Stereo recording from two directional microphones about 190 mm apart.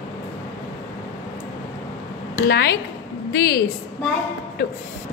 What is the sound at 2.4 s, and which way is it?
A woman's voice, 55° left (ahead or behind).